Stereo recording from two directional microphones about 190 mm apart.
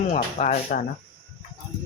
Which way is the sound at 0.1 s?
40° left (ahead or behind).